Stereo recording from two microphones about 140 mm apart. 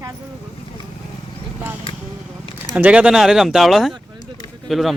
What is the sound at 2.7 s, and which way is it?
Speech, 10° right (ahead or behind).